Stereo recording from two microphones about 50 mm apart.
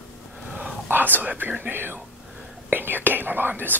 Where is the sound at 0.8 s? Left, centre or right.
Right.